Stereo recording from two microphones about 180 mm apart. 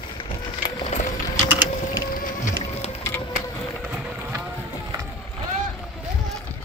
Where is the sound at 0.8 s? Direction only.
40° left (ahead or behind).